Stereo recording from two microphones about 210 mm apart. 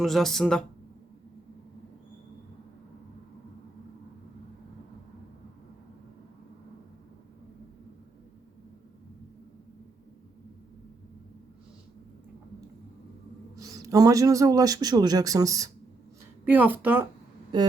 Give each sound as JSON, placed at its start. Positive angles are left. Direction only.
{"t": 0.0, "sound": "speech", "side_deg": 0}
{"t": 13.6, "sound": "speech", "side_deg": -15}